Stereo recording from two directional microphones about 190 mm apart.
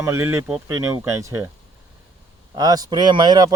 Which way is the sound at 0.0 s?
15° right (ahead or behind).